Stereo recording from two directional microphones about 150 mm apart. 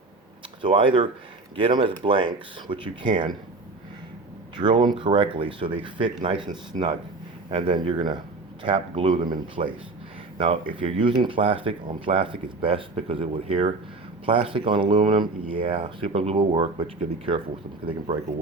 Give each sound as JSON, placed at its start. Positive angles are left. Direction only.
{"t": 0.6, "sound": "speech", "side_deg": -35}
{"t": 4.5, "sound": "speech", "side_deg": -35}